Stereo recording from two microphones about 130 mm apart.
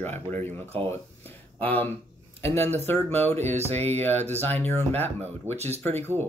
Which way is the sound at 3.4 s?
55° right (ahead or behind).